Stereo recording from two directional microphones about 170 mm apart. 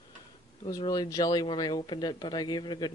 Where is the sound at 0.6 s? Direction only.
25° left (ahead or behind).